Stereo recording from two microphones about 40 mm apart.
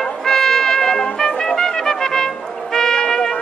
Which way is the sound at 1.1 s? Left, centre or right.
Centre.